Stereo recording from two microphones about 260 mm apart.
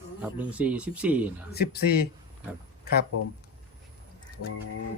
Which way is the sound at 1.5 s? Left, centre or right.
Left.